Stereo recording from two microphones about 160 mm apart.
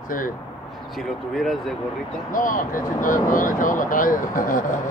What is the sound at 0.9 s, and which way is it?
Speech, centre (ahead or behind).